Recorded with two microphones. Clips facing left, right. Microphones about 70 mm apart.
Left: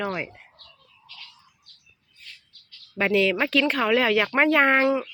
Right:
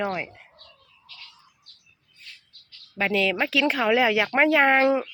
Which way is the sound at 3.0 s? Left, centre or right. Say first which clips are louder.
Left 2 dB; centre.